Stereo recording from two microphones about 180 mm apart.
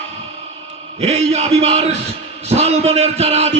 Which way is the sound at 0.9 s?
35° right (ahead or behind).